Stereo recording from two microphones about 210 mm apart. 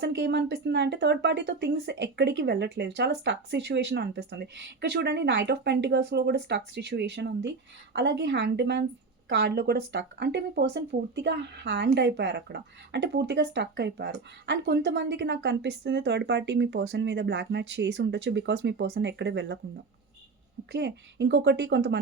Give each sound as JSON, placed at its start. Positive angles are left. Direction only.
{"t": 0.0, "sound": "speech", "side_deg": -55}
{"t": 20.7, "sound": "a woman's voice", "side_deg": -55}